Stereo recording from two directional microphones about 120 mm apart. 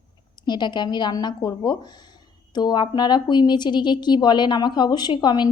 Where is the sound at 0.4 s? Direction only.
40° left (ahead or behind).